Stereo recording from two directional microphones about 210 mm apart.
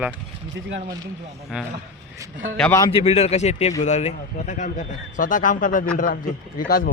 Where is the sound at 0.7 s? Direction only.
55° right (ahead or behind).